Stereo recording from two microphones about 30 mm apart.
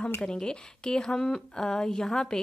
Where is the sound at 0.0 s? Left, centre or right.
Left.